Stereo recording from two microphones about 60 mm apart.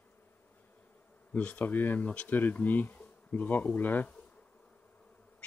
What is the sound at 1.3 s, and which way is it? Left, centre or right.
Speech, left.